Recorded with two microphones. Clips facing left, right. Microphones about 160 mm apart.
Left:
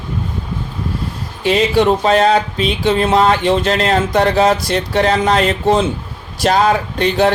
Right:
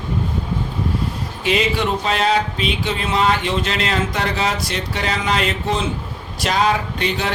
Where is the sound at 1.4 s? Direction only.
35° left (ahead or behind).